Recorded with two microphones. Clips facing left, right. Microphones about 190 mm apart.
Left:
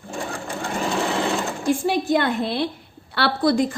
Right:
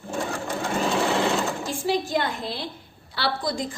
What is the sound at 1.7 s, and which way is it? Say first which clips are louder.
A woman's voice: left 9 dB; 55° left (ahead or behind).